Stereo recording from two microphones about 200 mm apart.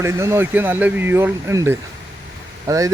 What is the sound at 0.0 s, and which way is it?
A man's voice, 15° right (ahead or behind).